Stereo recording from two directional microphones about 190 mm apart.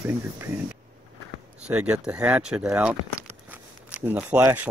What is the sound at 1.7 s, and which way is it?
Speech, 5° right (ahead or behind).